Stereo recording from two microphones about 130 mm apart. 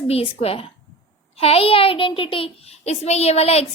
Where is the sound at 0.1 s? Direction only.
50° left (ahead or behind).